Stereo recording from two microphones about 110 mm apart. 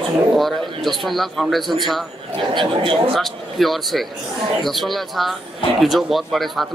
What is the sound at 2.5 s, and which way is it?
Speech, 50° right (ahead or behind).